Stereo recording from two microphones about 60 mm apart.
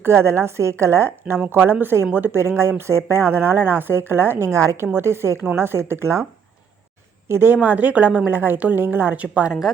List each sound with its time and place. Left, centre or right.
0.0 s a woman's voice: right
2.3 s speech: right
4.9 s speech: right
7.3 s a woman's voice: right